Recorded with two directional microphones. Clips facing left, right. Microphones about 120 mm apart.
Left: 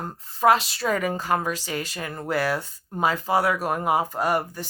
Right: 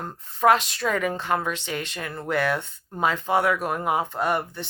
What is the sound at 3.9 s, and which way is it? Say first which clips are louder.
Speech: left 2 dB; 40° left (ahead or behind).